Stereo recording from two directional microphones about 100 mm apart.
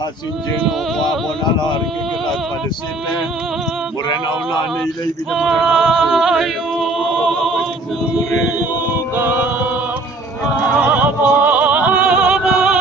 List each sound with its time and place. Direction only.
5.3 s male singing: centre (ahead or behind)
9.1 s music: 20° right (ahead or behind)
10.8 s music: 15° right (ahead or behind)